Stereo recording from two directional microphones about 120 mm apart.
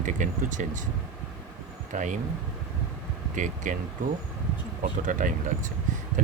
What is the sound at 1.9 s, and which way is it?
Speech, 90° right.